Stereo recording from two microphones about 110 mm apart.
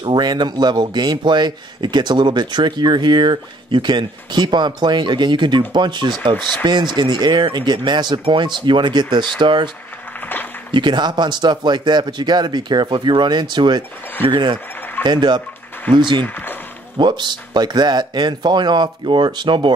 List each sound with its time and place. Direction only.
0.0 s a man's voice: 40° right (ahead or behind)
10.7 s a man's voice: 45° right (ahead or behind)
16.2 s speech: 15° left (ahead or behind)
17.0 s a man's voice: 45° right (ahead or behind)